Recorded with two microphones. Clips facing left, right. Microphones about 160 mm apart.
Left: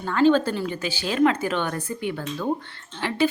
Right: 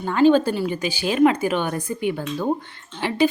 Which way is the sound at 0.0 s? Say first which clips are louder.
Right 3 dB; 15° right (ahead or behind).